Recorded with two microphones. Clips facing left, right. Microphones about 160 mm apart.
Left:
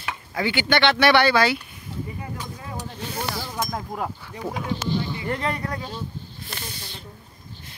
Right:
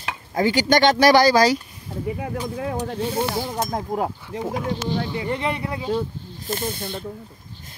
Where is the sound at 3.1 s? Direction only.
25° right (ahead or behind).